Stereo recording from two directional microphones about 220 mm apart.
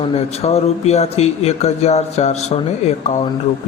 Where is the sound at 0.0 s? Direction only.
25° left (ahead or behind).